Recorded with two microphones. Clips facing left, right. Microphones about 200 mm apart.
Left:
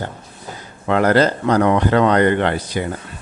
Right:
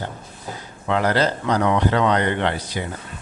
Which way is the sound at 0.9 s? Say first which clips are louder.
Left 5 dB; 50° left (ahead or behind).